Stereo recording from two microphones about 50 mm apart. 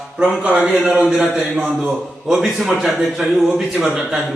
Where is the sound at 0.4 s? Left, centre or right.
Right.